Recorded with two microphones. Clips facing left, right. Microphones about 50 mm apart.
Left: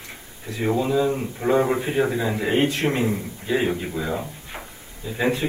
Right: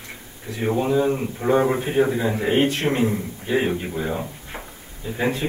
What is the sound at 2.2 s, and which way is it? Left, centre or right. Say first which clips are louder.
A man's voice: right 1 dB; right.